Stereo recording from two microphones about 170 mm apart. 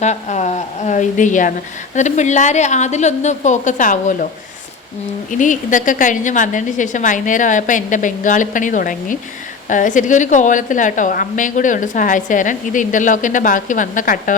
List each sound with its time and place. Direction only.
0.0 s a woman's voice: 45° left (ahead or behind)
5.4 s a woman's voice: 50° left (ahead or behind)